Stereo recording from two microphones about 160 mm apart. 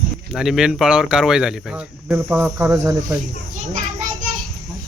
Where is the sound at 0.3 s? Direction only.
5° right (ahead or behind).